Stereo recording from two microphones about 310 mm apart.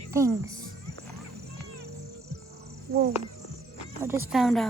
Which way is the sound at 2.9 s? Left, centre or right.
Right.